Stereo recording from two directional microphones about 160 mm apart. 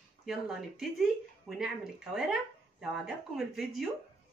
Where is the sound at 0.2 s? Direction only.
Centre (ahead or behind).